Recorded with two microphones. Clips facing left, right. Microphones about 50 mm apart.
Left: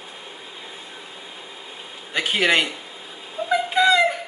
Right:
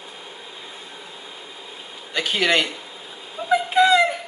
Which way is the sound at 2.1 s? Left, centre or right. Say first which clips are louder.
Left 1 dB; centre.